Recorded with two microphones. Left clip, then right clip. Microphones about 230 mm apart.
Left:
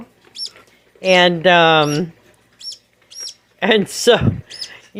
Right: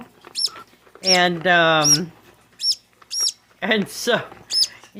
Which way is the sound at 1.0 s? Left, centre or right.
Left.